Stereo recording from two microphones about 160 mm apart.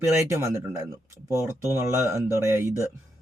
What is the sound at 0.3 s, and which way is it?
Speech, 15° right (ahead or behind).